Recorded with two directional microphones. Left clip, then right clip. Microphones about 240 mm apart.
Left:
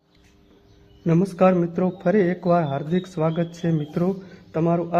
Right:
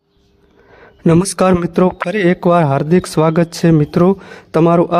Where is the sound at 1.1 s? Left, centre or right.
Right.